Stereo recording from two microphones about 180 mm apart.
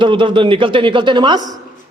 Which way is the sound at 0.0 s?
25° right (ahead or behind).